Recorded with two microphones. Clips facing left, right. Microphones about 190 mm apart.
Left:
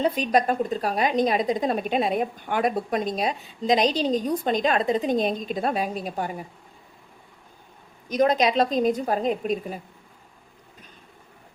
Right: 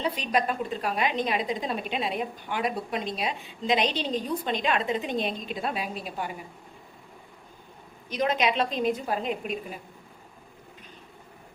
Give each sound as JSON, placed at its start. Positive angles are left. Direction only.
{"t": 0.0, "sound": "a woman's voice", "side_deg": 45}
{"t": 8.1, "sound": "a woman's voice", "side_deg": 40}